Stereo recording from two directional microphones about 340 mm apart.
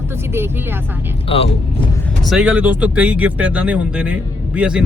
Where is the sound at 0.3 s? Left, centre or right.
Centre.